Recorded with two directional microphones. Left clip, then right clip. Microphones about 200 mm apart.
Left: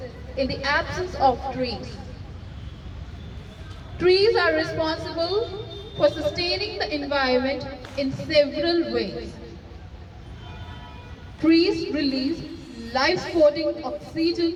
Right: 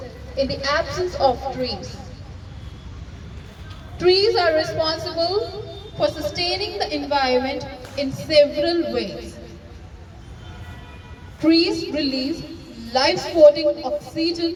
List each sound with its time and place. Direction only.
0.4 s a woman's voice: 50° right (ahead or behind)
3.9 s a woman's voice: 50° right (ahead or behind)
11.4 s a woman's voice: 45° right (ahead or behind)